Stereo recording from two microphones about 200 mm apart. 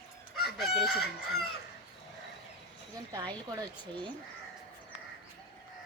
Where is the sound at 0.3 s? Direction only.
Centre (ahead or behind).